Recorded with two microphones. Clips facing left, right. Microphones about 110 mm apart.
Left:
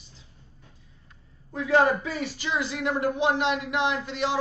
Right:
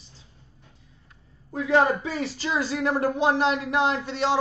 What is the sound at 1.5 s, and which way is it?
Speech, 25° right (ahead or behind).